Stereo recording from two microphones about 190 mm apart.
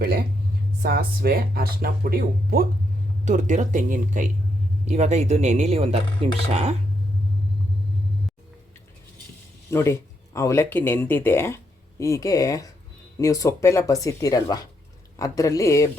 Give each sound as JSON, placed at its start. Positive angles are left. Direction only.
{"t": 0.0, "sound": "speech", "side_deg": -50}
{"t": 3.2, "sound": "speech", "side_deg": -40}
{"t": 9.6, "sound": "speech", "side_deg": 15}